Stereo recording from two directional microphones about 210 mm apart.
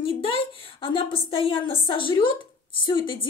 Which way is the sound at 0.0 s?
25° left (ahead or behind).